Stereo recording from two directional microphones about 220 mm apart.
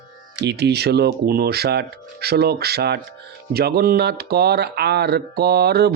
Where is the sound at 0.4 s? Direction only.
50° right (ahead or behind).